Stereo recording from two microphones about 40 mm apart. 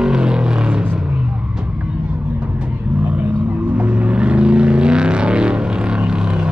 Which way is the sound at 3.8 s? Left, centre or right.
Right.